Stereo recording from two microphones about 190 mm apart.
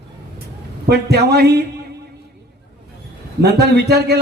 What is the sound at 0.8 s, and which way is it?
Speech, 60° right (ahead or behind).